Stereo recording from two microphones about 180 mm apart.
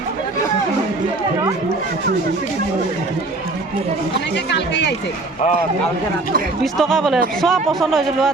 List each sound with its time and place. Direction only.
4.5 s speech: 75° left (ahead or behind)
6.7 s speech: centre (ahead or behind)